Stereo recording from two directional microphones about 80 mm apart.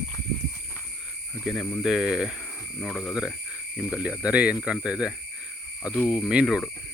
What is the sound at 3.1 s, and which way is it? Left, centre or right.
Cricket, centre.